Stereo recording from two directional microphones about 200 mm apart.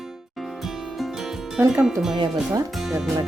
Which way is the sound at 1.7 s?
5° right (ahead or behind).